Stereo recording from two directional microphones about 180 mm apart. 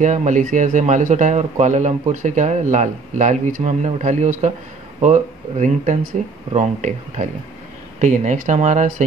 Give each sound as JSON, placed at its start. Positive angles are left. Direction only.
{"t": 0.0, "sound": "speech", "side_deg": -45}